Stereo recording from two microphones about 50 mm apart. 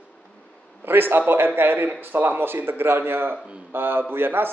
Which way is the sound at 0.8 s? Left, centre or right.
Right.